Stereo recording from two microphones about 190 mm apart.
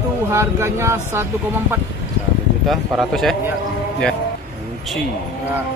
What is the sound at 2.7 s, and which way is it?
Speech, centre (ahead or behind).